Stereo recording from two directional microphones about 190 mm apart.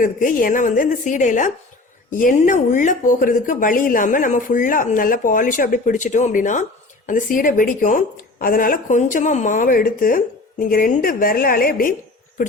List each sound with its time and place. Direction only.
0.0 s a woman's voice: 45° left (ahead or behind)